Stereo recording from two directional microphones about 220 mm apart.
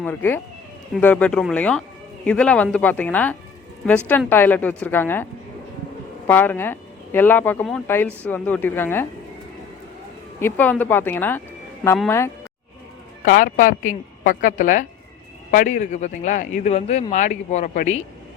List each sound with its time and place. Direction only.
0.0 s speech: 10° left (ahead or behind)
10.4 s speech: 10° left (ahead or behind)
13.2 s speech: 35° left (ahead or behind)